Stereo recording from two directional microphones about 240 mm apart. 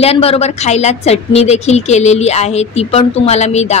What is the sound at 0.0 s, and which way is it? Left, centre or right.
A woman's voice, left.